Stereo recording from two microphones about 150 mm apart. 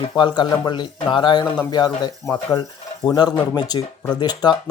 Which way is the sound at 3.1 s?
30° left (ahead or behind).